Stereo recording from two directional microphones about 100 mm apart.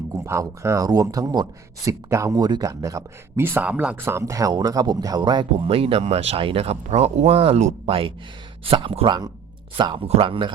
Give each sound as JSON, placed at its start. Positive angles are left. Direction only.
{"t": 0.1, "sound": "speech", "side_deg": -30}
{"t": 3.4, "sound": "speech", "side_deg": -20}
{"t": 5.6, "sound": "speech", "side_deg": -70}
{"t": 9.0, "sound": "speech", "side_deg": -45}
{"t": 9.7, "sound": "speech", "side_deg": -55}